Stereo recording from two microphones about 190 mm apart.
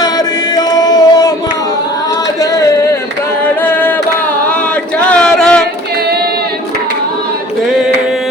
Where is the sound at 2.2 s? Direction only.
20° left (ahead or behind).